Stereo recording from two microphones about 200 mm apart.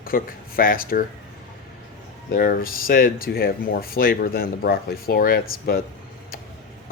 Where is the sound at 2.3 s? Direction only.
45° left (ahead or behind).